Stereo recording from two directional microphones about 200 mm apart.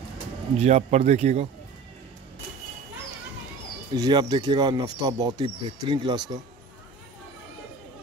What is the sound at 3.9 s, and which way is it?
Speech, 20° right (ahead or behind).